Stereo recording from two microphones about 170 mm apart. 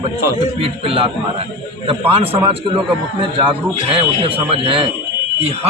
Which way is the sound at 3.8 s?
35° right (ahead or behind).